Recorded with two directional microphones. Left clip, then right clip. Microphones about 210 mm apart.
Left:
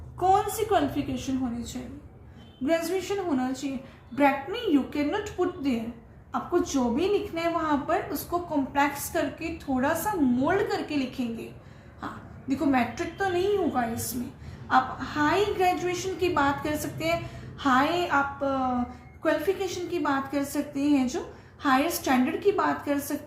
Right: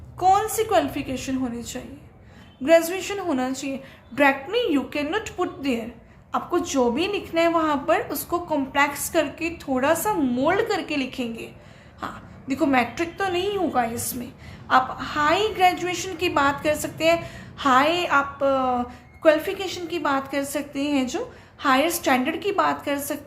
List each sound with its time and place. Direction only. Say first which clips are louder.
0.2 s a woman's voice: right 4 dB; 45° right (ahead or behind)
2.6 s a woman's voice: right 8 dB; 45° right (ahead or behind)